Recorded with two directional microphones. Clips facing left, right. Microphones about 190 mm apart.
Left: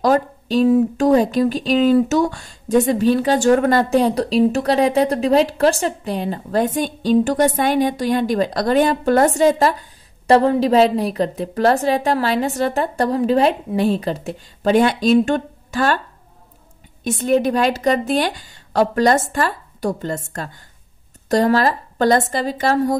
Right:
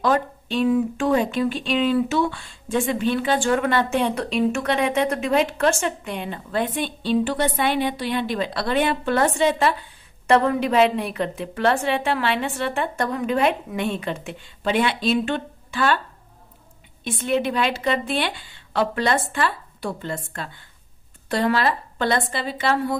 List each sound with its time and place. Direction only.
0.0 s speech: 40° left (ahead or behind)
17.0 s a woman's voice: 45° left (ahead or behind)